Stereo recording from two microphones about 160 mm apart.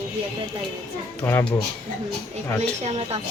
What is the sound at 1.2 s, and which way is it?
Speech, 15° left (ahead or behind).